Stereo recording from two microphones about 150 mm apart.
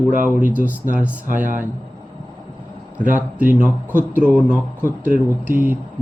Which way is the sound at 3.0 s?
10° right (ahead or behind).